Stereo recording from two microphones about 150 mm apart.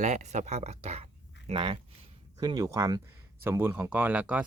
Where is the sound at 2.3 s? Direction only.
25° right (ahead or behind).